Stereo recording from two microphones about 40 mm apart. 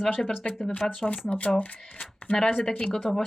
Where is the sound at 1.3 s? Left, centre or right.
Left.